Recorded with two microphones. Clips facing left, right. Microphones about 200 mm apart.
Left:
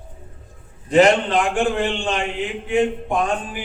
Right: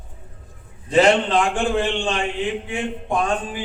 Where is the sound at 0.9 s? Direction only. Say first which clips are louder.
Left 1 dB; 20° left (ahead or behind).